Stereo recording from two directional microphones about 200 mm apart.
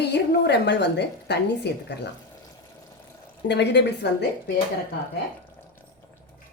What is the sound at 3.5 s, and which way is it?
Speech, 60° left (ahead or behind).